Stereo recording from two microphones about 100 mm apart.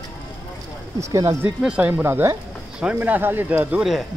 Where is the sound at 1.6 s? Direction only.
15° right (ahead or behind).